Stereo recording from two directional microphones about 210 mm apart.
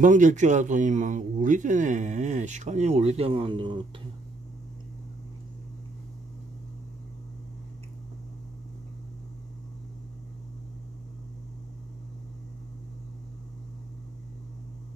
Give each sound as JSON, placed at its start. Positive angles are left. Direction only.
{"t": 0.0, "sound": "speech", "side_deg": -40}